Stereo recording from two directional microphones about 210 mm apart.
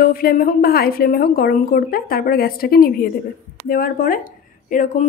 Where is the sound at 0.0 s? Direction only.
45° left (ahead or behind).